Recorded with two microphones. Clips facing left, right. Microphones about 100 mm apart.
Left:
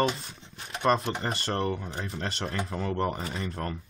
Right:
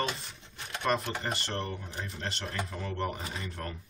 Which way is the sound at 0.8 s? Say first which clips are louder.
Left 5 dB; 25° left (ahead or behind).